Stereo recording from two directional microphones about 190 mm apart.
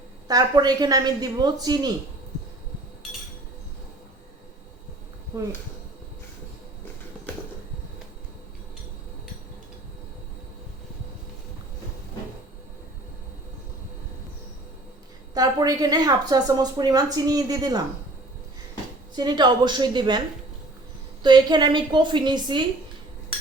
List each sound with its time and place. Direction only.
0.3 s a woman's voice: 20° right (ahead or behind)
5.3 s speech: 15° right (ahead or behind)
15.4 s a woman's voice: 20° right (ahead or behind)
19.1 s a woman's voice: 25° right (ahead or behind)
21.2 s a woman's voice: 20° right (ahead or behind)